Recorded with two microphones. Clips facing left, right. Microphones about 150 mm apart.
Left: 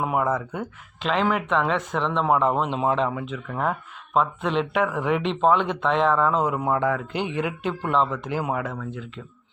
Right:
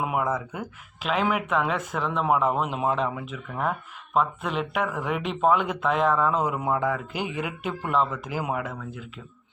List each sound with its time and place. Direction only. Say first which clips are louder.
0.2 s speech: left 3 dB; 5° right (ahead or behind)